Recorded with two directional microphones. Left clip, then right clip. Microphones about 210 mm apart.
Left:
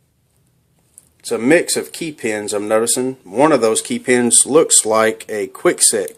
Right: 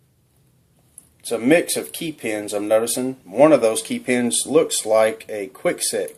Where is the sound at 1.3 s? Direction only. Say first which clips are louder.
Left 3 dB; 40° left (ahead or behind).